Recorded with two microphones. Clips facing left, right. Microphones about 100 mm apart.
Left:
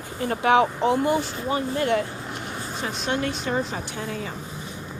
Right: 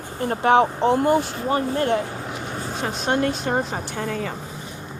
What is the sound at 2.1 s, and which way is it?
Vehicle, 60° right (ahead or behind).